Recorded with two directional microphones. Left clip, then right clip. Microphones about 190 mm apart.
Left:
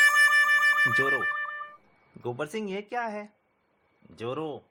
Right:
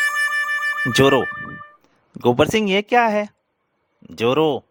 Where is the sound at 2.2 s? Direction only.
50° right (ahead or behind).